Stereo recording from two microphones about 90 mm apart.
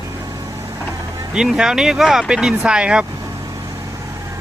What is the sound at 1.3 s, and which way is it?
Speech, 5° right (ahead or behind).